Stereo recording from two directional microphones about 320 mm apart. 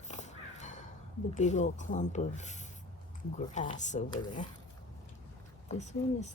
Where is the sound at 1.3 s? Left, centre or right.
Left.